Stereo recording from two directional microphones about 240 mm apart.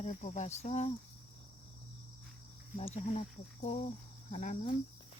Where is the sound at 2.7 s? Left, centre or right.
Left.